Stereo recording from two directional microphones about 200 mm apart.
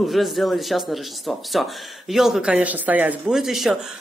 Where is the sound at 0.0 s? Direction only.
Centre (ahead or behind).